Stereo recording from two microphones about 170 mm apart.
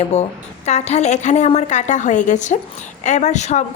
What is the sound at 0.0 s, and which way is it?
A woman's voice, 40° left (ahead or behind).